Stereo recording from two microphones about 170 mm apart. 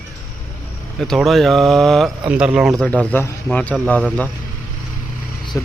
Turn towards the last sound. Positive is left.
turn(degrees=20)  # may be behind; listen again after turning